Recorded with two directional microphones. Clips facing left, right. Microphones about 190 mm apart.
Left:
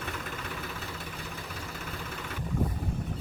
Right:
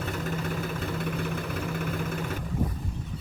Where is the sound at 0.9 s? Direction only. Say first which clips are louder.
Right 10 dB; 60° right (ahead or behind).